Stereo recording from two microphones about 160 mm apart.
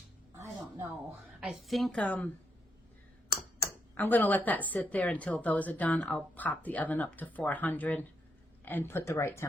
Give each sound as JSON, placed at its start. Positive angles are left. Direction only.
{"t": 0.3, "sound": "music", "side_deg": -15}
{"t": 1.4, "sound": "a woman's voice", "side_deg": 0}
{"t": 3.9, "sound": "a woman's voice", "side_deg": 10}